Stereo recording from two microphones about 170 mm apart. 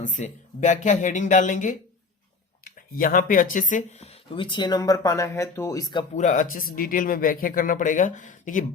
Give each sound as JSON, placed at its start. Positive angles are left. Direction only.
{"t": 0.0, "sound": "speech", "side_deg": 45}
{"t": 6.1, "sound": "speech", "side_deg": 45}